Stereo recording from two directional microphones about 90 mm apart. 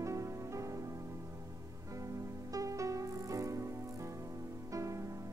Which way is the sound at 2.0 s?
40° right (ahead or behind).